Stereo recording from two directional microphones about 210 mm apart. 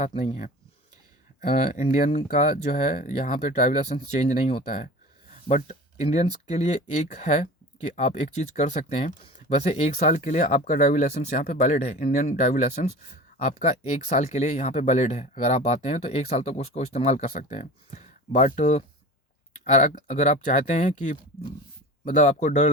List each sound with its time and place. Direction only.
0.0 s speech: 30° left (ahead or behind)
1.4 s speech: 35° left (ahead or behind)
22.0 s speech: 35° left (ahead or behind)